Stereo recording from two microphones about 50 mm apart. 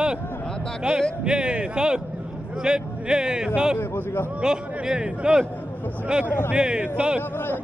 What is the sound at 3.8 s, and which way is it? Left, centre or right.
Speech, left.